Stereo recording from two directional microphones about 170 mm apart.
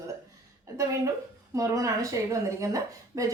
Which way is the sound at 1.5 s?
20° right (ahead or behind).